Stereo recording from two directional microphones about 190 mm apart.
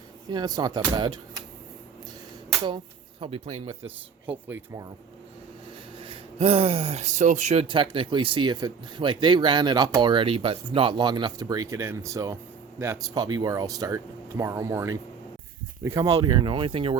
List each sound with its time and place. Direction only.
0.3 s speech: 20° right (ahead or behind)
2.6 s speech: 25° right (ahead or behind)
4.5 s speech: 15° right (ahead or behind)
6.0 s speech: 30° right (ahead or behind)